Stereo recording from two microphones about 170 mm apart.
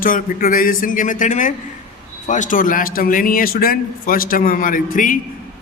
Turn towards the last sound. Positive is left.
turn(degrees=55)  # may be behind; listen again after turning